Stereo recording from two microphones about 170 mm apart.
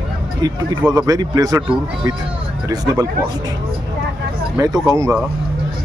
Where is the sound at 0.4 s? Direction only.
20° right (ahead or behind).